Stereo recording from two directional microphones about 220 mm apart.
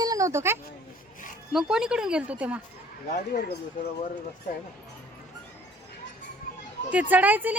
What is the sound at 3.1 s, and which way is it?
Speech, 45° left (ahead or behind).